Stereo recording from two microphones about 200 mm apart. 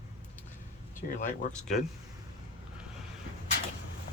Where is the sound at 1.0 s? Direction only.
40° left (ahead or behind).